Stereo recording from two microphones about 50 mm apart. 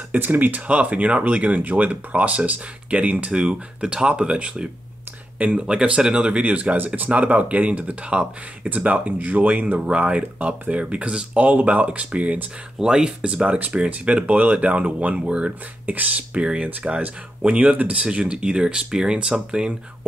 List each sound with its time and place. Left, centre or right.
0.1 s speech: right
3.3 s speech: centre
12.7 s speech: centre
13.6 s speech: right
15.1 s speech: centre
15.9 s speech: right; by 19.7 s centre